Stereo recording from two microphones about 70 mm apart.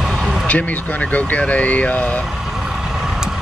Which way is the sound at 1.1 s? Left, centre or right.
Left.